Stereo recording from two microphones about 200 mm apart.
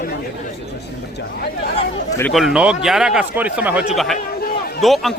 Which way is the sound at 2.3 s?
5° right (ahead or behind).